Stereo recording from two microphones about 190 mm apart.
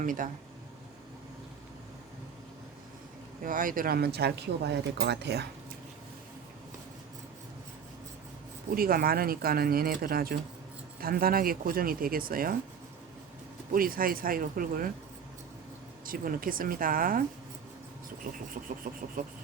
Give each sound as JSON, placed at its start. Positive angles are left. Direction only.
{"t": 0.0, "sound": "speech", "side_deg": -45}
{"t": 3.4, "sound": "speech", "side_deg": -45}
{"t": 8.7, "sound": "speech", "side_deg": -50}
{"t": 13.7, "sound": "speech", "side_deg": -50}
{"t": 16.0, "sound": "speech", "side_deg": -50}
{"t": 18.8, "sound": "speech", "side_deg": -45}